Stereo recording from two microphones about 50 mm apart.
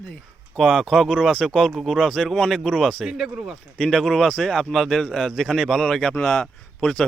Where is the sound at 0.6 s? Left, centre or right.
Centre.